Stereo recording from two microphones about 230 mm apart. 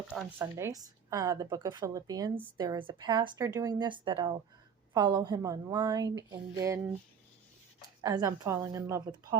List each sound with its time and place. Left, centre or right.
0.1 s speech: centre
8.0 s speech: centre